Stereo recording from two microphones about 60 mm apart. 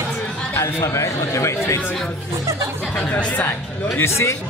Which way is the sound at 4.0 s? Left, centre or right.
Left.